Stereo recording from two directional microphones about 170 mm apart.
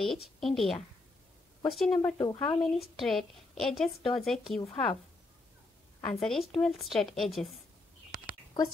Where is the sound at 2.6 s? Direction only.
Centre (ahead or behind).